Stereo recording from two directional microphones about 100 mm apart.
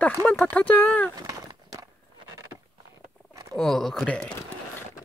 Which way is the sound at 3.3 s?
35° right (ahead or behind).